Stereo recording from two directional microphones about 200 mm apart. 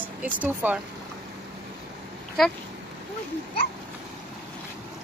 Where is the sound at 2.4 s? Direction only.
Centre (ahead or behind).